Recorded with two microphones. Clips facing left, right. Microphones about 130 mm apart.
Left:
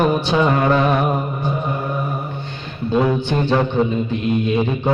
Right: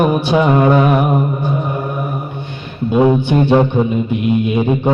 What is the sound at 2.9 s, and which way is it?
Speech, 15° right (ahead or behind).